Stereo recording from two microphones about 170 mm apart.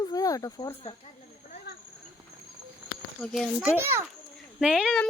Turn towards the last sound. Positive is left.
turn(degrees=-5)  # may be behind; listen again after turning